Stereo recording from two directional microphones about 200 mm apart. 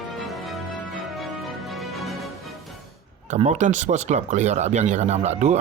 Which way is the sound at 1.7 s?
Centre (ahead or behind).